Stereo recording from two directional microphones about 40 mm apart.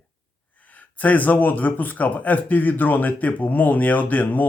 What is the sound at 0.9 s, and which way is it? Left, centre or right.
Speech, left.